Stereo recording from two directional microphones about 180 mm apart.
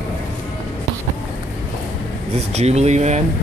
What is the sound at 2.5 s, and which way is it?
Speech, 40° right (ahead or behind).